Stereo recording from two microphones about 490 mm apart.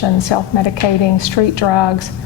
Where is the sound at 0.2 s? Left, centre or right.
Left.